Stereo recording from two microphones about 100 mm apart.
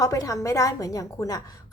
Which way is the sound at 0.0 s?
35° left (ahead or behind).